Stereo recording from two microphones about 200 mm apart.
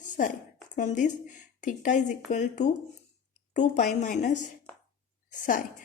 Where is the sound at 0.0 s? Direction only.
40° left (ahead or behind).